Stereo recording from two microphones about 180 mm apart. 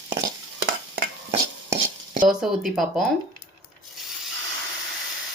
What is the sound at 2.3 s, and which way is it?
Speech, centre (ahead or behind).